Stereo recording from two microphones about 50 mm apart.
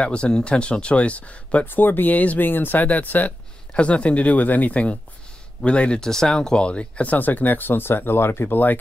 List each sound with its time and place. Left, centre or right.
0.0 s speech: centre
1.7 s speech: left
3.7 s speech: left
6.0 s speech: centre; by 8.7 s left